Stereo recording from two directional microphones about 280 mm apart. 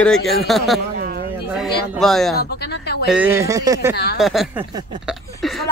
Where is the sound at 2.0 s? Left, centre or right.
Centre.